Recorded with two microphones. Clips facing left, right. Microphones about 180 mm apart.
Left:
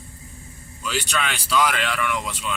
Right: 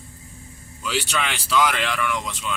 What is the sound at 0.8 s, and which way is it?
A man's voice, 5° right (ahead or behind).